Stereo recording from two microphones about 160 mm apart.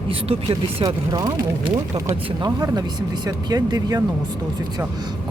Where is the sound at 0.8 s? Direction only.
25° right (ahead or behind).